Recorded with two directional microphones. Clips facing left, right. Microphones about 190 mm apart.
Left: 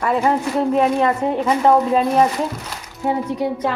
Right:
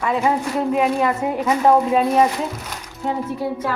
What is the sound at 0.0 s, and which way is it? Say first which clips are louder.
A woman's voice: left 2 dB; centre (ahead or behind).